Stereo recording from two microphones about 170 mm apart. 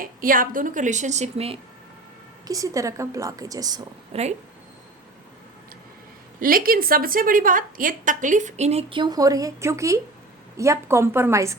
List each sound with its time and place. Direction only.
0.0 s a woman's voice: 55° right (ahead or behind); by 1.5 s 40° right (ahead or behind)
2.5 s a woman's voice: 20° right (ahead or behind)
4.1 s speech: 40° right (ahead or behind)
6.4 s a woman's voice: 55° right (ahead or behind); by 11.5 s 15° right (ahead or behind)